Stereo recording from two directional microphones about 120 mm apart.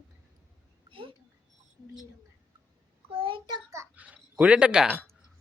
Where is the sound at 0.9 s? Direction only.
45° right (ahead or behind).